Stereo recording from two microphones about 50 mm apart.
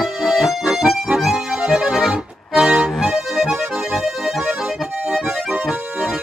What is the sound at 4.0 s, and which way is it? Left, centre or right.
Accordion, centre.